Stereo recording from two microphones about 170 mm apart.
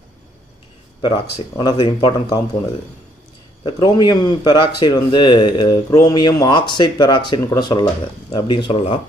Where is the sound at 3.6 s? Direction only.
25° left (ahead or behind).